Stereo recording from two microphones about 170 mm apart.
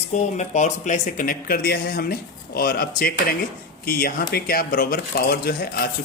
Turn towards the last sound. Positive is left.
turn(degrees=65)  # may be behind; listen again after turning